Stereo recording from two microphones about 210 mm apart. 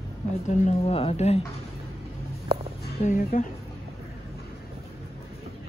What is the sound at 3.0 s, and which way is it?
Speech, 35° left (ahead or behind).